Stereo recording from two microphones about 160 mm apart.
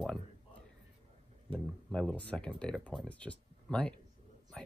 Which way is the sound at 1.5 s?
35° right (ahead or behind).